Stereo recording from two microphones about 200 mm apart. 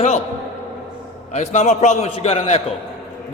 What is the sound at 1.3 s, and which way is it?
A man's voice, 35° left (ahead or behind).